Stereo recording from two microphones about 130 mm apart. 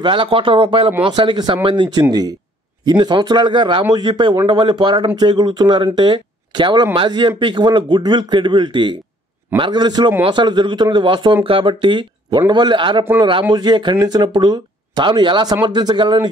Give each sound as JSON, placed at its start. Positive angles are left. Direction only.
{"t": 0.0, "sound": "speech", "side_deg": -40}
{"t": 2.0, "sound": "speech", "side_deg": -30}